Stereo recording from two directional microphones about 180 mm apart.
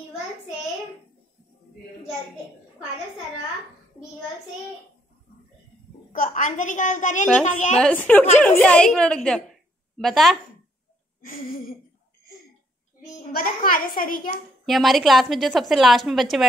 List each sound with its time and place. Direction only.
6.1 s a woman's voice: 45° left (ahead or behind)
7.7 s a woman's voice: 5° left (ahead or behind)
13.3 s a woman's voice: 55° left (ahead or behind)
14.7 s a woman's voice: centre (ahead or behind)